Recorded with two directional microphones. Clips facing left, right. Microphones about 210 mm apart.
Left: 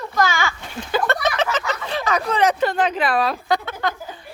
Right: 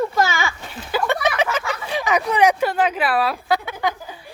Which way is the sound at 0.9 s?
10° right (ahead or behind).